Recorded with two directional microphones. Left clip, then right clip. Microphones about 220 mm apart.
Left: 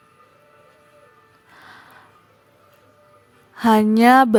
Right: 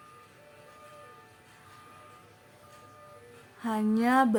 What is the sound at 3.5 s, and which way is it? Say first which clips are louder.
Speech: left 15 dB; 45° left (ahead or behind).